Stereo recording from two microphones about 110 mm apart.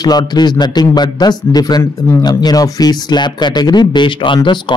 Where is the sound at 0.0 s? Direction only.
40° left (ahead or behind).